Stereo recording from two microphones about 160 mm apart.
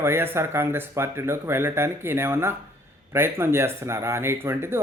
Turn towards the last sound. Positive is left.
turn(degrees=-15)  # may be behind; listen again after turning